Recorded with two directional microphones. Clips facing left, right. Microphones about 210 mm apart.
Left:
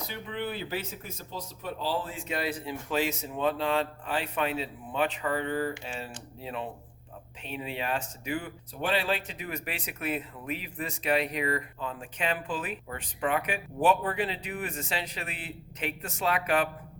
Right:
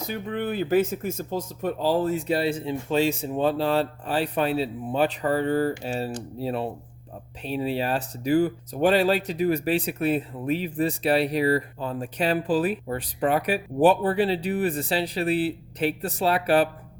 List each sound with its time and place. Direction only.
0.1 s speech: 45° right (ahead or behind)